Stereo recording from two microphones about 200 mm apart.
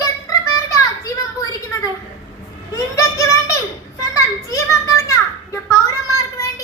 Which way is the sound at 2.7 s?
15° left (ahead or behind).